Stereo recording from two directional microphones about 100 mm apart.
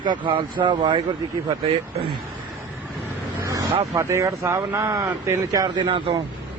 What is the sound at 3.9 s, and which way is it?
Speech, 30° right (ahead or behind).